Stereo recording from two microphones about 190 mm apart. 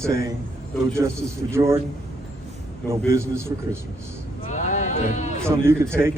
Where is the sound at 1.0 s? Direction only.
15° right (ahead or behind).